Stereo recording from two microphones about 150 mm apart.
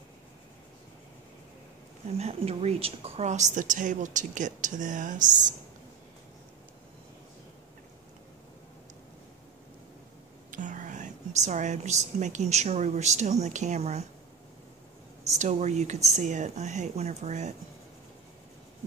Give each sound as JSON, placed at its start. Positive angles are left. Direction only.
{"t": 2.1, "sound": "a woman's voice", "side_deg": -45}
{"t": 10.5, "sound": "a woman's voice", "side_deg": -60}
{"t": 15.2, "sound": "speech", "side_deg": -50}